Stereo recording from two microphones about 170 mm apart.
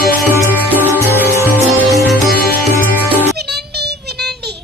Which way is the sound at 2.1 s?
65° left (ahead or behind).